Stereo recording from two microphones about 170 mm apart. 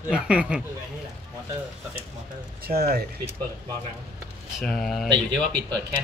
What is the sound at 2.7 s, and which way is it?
Speech, 65° right (ahead or behind).